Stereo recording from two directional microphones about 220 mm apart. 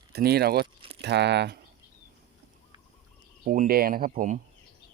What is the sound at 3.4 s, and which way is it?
Speech, 40° right (ahead or behind).